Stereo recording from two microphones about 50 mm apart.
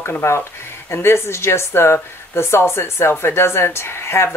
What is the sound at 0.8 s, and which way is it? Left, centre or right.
Speech, left.